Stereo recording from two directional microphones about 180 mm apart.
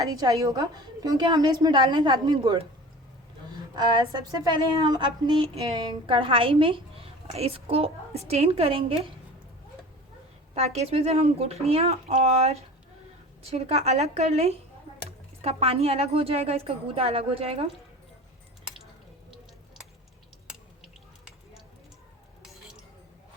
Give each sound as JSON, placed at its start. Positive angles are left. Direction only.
{"t": 0.0, "sound": "a woman's voice", "side_deg": -20}
{"t": 3.8, "sound": "a woman's voice", "side_deg": -25}
{"t": 10.5, "sound": "a woman's voice", "side_deg": -35}